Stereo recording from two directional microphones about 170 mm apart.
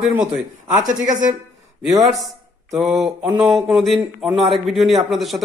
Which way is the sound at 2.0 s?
Centre (ahead or behind).